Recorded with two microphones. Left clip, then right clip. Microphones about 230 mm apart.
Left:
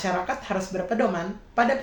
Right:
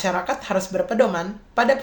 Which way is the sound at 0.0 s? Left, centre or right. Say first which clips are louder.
Right 3 dB; right.